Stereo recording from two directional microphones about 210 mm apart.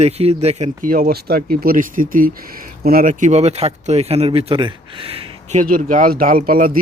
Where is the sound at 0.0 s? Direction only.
30° right (ahead or behind).